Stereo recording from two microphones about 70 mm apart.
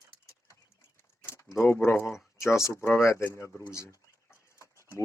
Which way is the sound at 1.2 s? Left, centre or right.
Left.